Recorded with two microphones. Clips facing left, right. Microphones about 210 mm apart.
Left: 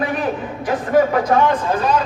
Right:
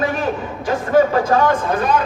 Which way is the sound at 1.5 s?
55° right (ahead or behind).